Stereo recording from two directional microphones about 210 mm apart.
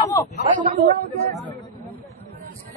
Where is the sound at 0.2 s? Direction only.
15° left (ahead or behind).